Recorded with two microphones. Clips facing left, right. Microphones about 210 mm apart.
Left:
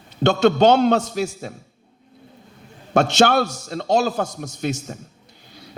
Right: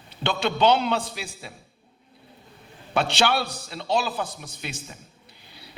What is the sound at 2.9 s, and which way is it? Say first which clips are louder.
A man's voice: left 7 dB; 45° left (ahead or behind).